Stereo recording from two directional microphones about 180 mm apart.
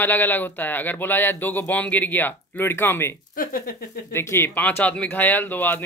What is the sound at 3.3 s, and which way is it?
Speech, 50° left (ahead or behind).